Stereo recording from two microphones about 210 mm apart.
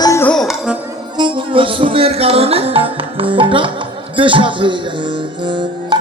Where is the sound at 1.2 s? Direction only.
25° right (ahead or behind).